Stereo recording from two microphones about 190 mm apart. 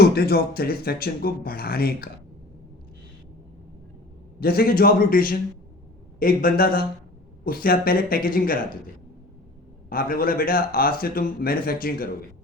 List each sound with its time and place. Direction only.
0.0 s speech: 55° left (ahead or behind)
4.4 s speech: 50° left (ahead or behind)
9.9 s speech: 50° left (ahead or behind)